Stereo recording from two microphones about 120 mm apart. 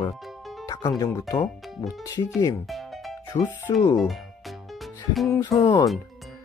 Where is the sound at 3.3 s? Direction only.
65° left (ahead or behind).